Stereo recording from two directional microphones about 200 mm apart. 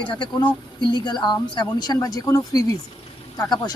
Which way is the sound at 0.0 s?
25° left (ahead or behind).